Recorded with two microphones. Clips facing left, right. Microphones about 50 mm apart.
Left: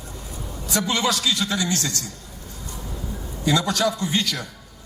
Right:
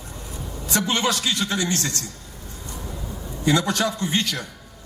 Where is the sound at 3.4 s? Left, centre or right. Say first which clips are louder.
Even; right.